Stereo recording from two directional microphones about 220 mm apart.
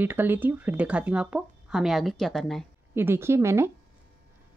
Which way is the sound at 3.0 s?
10° right (ahead or behind).